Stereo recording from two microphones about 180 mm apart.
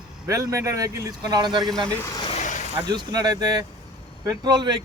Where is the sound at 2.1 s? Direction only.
30° left (ahead or behind).